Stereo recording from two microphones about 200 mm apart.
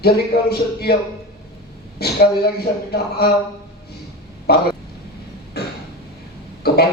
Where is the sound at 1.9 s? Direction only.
50° left (ahead or behind).